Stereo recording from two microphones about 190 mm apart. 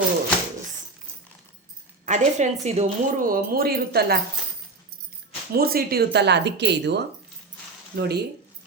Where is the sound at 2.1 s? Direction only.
40° right (ahead or behind); by 4.2 s 55° right (ahead or behind).